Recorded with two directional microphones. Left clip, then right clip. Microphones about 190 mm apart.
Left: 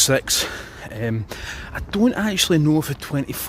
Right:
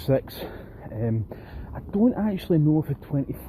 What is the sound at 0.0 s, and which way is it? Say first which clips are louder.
Speech: left 7 dB; 25° left (ahead or behind).